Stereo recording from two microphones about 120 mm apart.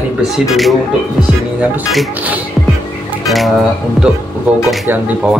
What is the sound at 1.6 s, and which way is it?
Speech, 10° right (ahead or behind).